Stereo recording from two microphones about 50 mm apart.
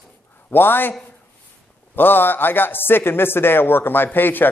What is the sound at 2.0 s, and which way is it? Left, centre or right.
A man's voice, left.